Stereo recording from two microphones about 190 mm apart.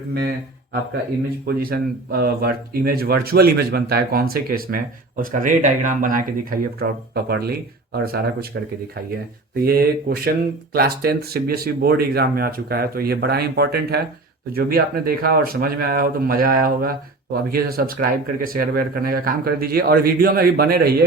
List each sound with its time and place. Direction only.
0.1 s speech: 55° right (ahead or behind)
9.6 s speech: 55° right (ahead or behind)